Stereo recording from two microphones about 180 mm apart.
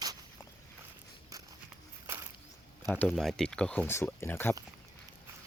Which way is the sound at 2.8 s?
5° left (ahead or behind).